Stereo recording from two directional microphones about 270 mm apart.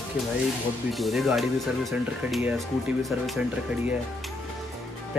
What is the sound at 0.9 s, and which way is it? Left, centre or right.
Speech, centre.